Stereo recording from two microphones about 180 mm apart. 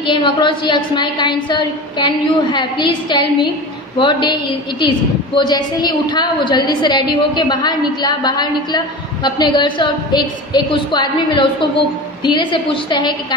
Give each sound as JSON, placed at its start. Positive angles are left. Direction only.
{"t": 0.0, "sound": "a woman's voice", "side_deg": 25}